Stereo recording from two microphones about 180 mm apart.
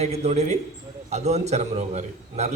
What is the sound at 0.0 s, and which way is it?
A man's voice, 35° right (ahead or behind).